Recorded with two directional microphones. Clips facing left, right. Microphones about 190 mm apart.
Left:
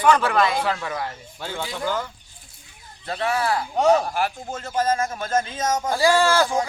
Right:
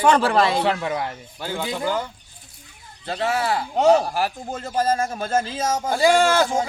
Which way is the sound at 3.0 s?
25° right (ahead or behind).